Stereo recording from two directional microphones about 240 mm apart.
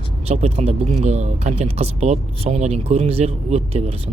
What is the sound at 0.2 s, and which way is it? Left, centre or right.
Speech, right.